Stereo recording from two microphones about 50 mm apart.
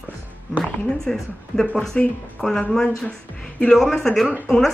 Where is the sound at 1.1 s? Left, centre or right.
Centre.